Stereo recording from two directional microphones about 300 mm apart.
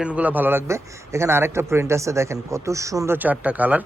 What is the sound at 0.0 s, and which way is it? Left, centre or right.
A man's voice, centre.